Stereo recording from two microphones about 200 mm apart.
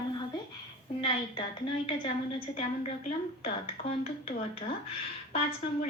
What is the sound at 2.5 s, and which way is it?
Speech, 30° left (ahead or behind).